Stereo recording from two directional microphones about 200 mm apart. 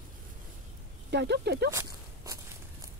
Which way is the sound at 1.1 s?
55° right (ahead or behind).